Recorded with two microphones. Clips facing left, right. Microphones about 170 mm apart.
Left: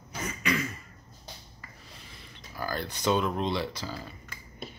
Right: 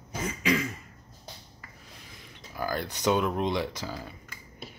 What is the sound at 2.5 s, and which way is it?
Speech, 15° right (ahead or behind).